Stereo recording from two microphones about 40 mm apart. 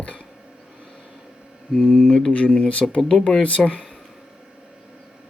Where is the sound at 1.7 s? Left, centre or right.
Centre.